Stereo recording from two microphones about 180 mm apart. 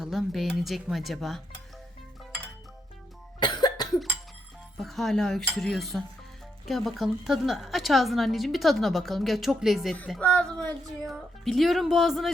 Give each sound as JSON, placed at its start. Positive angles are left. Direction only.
{"t": 0.0, "sound": "a woman's voice", "side_deg": 0}
{"t": 3.4, "sound": "cough", "side_deg": 25}
{"t": 4.8, "sound": "a woman's voice", "side_deg": 0}